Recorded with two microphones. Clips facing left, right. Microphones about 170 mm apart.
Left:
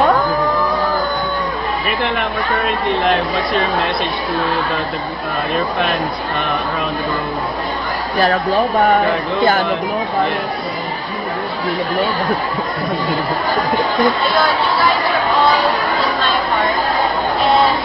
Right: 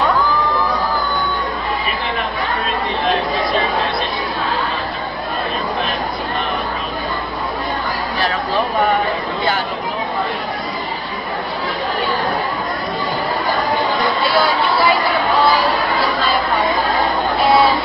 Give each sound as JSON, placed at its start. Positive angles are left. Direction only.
{"t": 0.0, "sound": "music", "side_deg": 50}
{"t": 8.2, "sound": "speech", "side_deg": 45}